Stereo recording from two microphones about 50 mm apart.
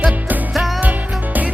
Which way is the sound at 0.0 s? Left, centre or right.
Right.